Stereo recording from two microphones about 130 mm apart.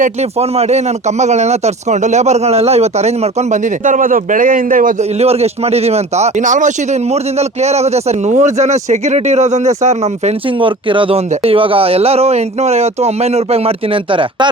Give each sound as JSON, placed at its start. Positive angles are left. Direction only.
{"t": 0.0, "sound": "a man's voice", "side_deg": -55}
{"t": 5.1, "sound": "a man's voice", "side_deg": -55}
{"t": 10.6, "sound": "speech", "side_deg": -40}